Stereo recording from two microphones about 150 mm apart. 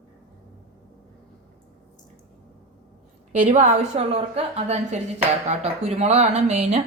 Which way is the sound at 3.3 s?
50° right (ahead or behind).